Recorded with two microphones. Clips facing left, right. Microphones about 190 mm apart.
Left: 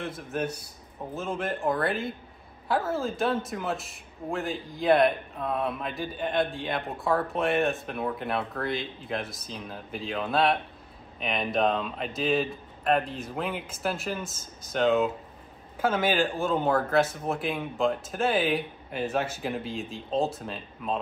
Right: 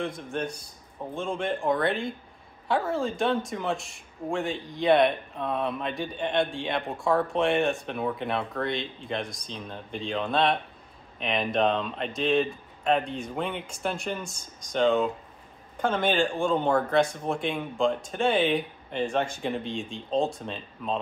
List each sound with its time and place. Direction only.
0.0 s speech: 5° left (ahead or behind)